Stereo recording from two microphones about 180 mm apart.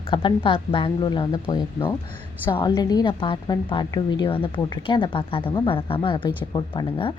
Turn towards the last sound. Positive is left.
turn(degrees=30)  # may be behind; listen again after turning